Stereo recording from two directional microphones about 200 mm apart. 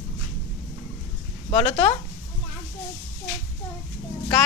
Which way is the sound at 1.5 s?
30° left (ahead or behind).